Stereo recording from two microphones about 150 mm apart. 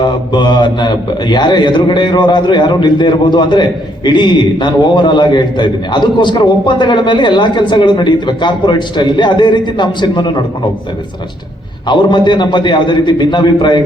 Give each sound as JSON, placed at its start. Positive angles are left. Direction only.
{"t": 0.0, "sound": "a man's voice", "side_deg": 30}
{"t": 11.9, "sound": "a man's voice", "side_deg": 30}